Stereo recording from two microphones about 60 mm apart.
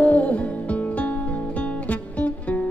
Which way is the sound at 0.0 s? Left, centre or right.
Left.